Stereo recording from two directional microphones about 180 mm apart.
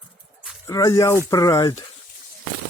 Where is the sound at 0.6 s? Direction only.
20° left (ahead or behind).